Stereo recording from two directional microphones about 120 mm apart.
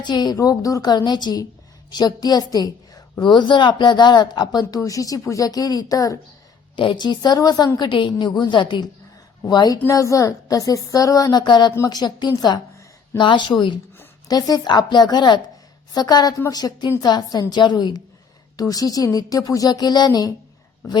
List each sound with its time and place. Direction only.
0.0 s a woman's voice: 35° left (ahead or behind)
6.7 s a woman's voice: 40° left (ahead or behind)